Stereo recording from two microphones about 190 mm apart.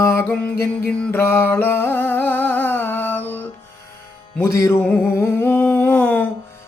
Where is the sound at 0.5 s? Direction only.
50° left (ahead or behind).